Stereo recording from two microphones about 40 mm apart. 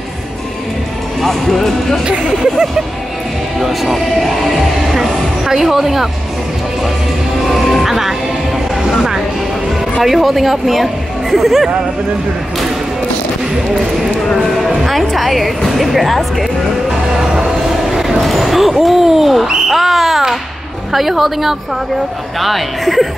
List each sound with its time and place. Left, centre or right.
1.2 s speech: centre
3.6 s music: centre
7.4 s speech: centre
7.8 s speech: centre
8.8 s vehicle: centre
10.0 s speech: centre
14.9 s a woman's voice: centre
17.8 s a sound: centre
18.2 s a woman's voice: centre